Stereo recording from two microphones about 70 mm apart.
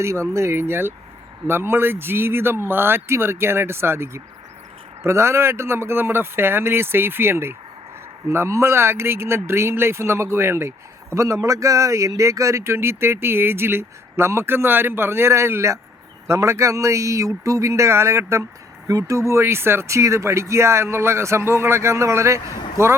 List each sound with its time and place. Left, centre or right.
0.0 s speech: right
18.9 s speech: right